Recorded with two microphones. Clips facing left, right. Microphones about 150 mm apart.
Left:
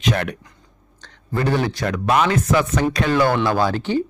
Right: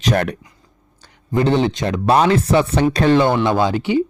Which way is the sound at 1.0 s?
20° right (ahead or behind).